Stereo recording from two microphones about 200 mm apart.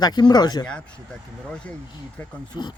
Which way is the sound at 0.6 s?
5° left (ahead or behind).